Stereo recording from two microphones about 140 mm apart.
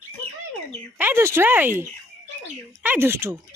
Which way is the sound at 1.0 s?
15° right (ahead or behind).